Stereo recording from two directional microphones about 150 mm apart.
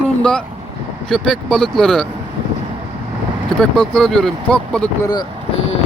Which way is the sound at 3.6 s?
5° left (ahead or behind).